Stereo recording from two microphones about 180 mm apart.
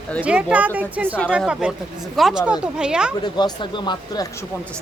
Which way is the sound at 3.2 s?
25° left (ahead or behind).